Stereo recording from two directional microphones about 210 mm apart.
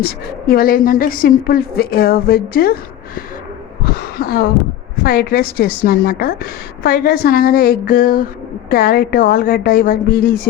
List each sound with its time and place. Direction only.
0.0 s a woman's voice: 45° left (ahead or behind)
3.8 s a sound: 45° left (ahead or behind)
5.0 s a woman's voice: 45° left (ahead or behind)